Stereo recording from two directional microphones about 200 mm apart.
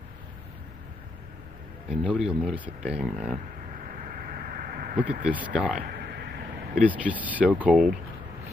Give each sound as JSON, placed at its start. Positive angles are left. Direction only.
{"t": 1.9, "sound": "speech", "side_deg": -5}
{"t": 4.1, "sound": "a sound", "side_deg": -45}
{"t": 5.2, "sound": "speech", "side_deg": -5}
{"t": 5.8, "sound": "speech", "side_deg": -50}
{"t": 6.9, "sound": "speech", "side_deg": -10}